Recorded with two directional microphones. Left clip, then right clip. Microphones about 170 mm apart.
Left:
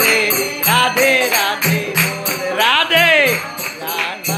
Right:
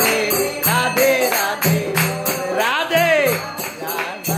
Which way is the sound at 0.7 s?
Centre (ahead or behind).